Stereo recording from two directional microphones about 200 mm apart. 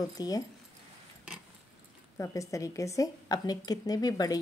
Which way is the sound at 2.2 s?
15° left (ahead or behind).